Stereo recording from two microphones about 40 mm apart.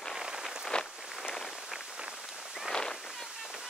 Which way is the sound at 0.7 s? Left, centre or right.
Left.